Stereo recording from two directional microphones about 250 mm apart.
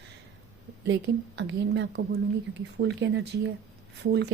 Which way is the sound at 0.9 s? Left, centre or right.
Right.